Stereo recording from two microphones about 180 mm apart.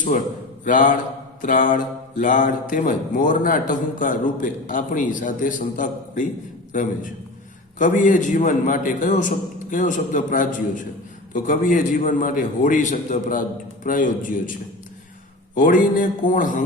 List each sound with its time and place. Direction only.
0.6 s speech: 45° left (ahead or behind)
7.8 s speech: 45° left (ahead or behind)
15.5 s speech: 45° left (ahead or behind)